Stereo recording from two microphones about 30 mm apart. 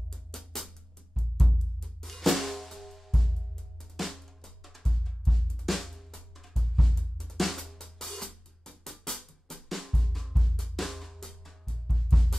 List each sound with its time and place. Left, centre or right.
0.3 s music: centre
1.1 s drum: centre
3.9 s music: centre
4.4 s drum: centre
7.0 s drum: centre